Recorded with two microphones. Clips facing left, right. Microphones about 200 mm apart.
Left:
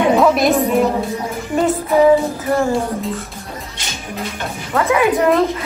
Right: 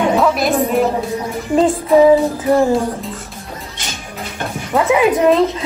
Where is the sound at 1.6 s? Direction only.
30° right (ahead or behind).